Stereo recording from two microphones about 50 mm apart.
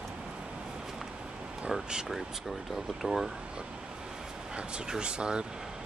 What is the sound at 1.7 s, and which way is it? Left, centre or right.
Speech, centre.